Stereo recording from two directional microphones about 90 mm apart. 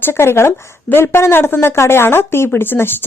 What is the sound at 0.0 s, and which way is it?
A woman's voice, 25° left (ahead or behind).